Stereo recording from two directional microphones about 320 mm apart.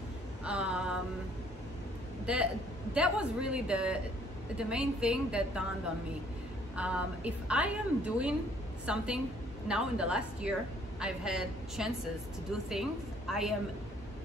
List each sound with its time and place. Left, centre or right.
0.5 s a sound: centre
2.2 s a woman's voice: centre
6.8 s a woman's voice: centre